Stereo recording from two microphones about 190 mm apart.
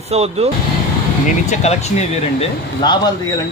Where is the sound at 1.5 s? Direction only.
35° left (ahead or behind).